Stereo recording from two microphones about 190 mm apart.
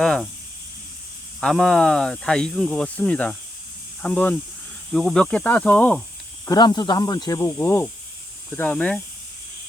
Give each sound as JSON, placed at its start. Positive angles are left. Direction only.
{"t": 0.0, "sound": "speech", "side_deg": 0}
{"t": 1.4, "sound": "speech", "side_deg": 5}
{"t": 6.4, "sound": "speech", "side_deg": 20}